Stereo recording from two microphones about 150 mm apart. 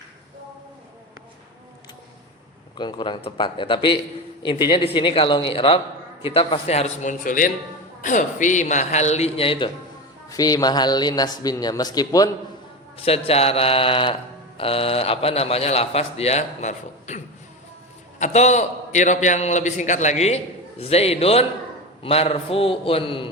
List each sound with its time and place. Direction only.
2.7 s a man's voice: 30° left (ahead or behind)
10.2 s speech: 25° left (ahead or behind)
13.0 s speech: 40° left (ahead or behind)
18.2 s a man's voice: 50° left (ahead or behind)